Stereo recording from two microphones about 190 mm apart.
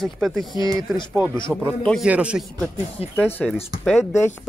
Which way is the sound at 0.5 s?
20° right (ahead or behind).